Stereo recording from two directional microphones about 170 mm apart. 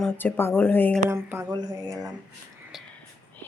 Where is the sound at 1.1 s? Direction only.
15° right (ahead or behind).